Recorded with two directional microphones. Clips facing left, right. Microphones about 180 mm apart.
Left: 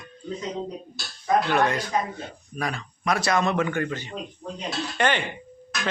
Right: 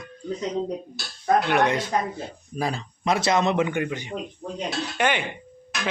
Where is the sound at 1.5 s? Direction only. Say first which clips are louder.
Right 1 dB; 20° right (ahead or behind).